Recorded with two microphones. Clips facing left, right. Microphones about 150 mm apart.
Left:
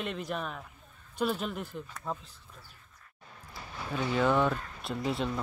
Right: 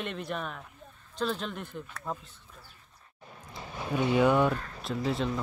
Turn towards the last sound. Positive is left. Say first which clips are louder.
# right 2 dB
turn(degrees=0)  # may be behind; listen again after turning